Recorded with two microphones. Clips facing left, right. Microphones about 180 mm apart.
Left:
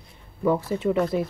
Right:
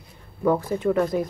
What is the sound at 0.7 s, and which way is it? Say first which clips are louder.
Speech: right 1 dB; 50° right (ahead or behind).